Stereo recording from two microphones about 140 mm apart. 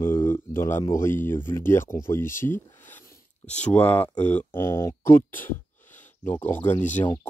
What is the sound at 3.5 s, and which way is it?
Speech, 10° left (ahead or behind).